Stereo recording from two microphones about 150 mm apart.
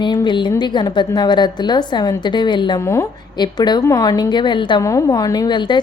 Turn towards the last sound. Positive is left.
turn(degrees=30)  # may be behind; listen again after turning